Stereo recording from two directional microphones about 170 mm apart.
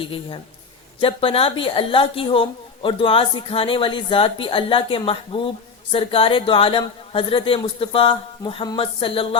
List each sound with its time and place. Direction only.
0.9 s a woman's voice: 30° left (ahead or behind)